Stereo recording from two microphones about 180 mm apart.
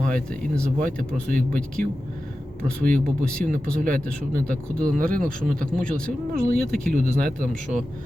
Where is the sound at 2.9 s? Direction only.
50° right (ahead or behind).